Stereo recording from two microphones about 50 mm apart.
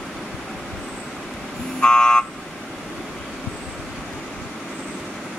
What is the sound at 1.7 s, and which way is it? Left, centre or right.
Car alarm, centre.